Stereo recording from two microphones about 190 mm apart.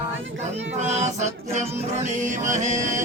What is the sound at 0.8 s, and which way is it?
Music, 35° right (ahead or behind).